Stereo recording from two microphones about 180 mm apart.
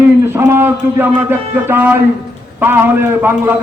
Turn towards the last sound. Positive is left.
turn(degrees=-10)  # may be behind; listen again after turning